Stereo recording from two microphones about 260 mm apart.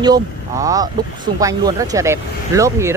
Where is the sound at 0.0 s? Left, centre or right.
Centre.